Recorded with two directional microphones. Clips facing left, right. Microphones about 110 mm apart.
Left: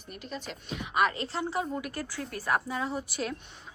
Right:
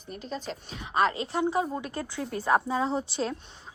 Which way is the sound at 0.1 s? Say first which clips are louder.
Right 4 dB; 35° right (ahead or behind).